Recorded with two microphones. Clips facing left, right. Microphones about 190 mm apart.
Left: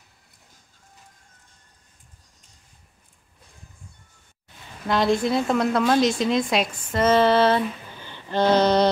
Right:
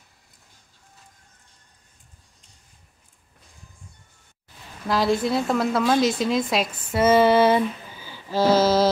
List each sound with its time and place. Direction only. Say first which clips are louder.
4.8 s a woman's voice: left 1 dB; centre (ahead or behind)